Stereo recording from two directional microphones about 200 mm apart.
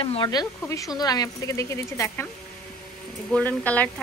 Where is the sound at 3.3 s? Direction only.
5° left (ahead or behind).